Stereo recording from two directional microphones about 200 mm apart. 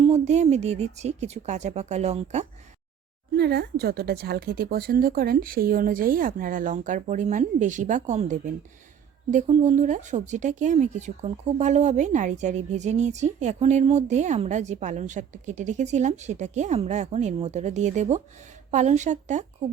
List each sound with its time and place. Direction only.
0.0 s speech: 35° right (ahead or behind)
3.3 s a woman's voice: 55° right (ahead or behind); by 19.5 s 35° right (ahead or behind)